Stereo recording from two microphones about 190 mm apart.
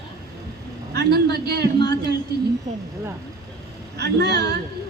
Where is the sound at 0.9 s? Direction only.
60° right (ahead or behind).